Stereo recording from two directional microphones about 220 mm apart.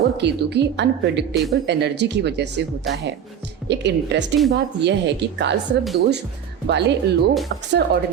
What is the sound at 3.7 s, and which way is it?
Speech, 50° right (ahead or behind).